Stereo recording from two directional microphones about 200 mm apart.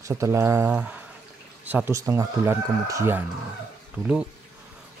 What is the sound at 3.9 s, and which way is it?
Speech, 5° right (ahead or behind).